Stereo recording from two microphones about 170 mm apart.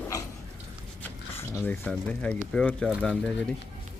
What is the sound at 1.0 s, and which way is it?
Speech, 10° left (ahead or behind).